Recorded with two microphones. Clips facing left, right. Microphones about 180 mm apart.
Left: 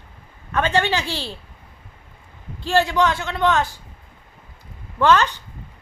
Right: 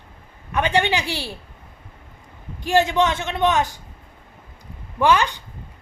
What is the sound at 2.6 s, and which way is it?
A man's voice, 15° right (ahead or behind).